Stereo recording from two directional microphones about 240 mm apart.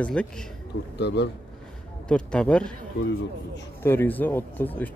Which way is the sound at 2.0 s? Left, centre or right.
Centre.